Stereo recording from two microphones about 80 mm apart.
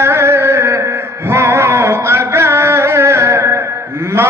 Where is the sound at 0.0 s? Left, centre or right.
Right.